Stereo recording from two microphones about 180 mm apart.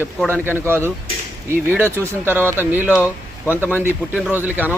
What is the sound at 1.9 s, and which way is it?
Speech, 15° right (ahead or behind).